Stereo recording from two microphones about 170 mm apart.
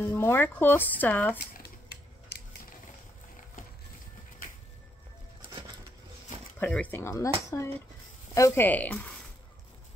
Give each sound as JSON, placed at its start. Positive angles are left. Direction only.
{"t": 0.0, "sound": "speech", "side_deg": 15}
{"t": 1.4, "sound": "a sound", "side_deg": 70}
{"t": 4.4, "sound": "music", "side_deg": 55}
{"t": 6.6, "sound": "speech", "side_deg": 10}